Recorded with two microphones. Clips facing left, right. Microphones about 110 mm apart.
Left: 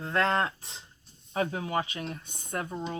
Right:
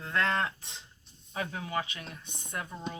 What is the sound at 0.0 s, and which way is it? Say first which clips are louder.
Speech: left 3 dB; 30° left (ahead or behind).